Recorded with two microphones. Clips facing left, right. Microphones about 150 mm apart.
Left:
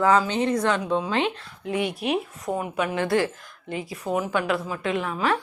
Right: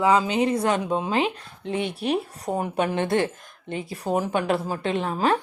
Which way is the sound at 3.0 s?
25° right (ahead or behind).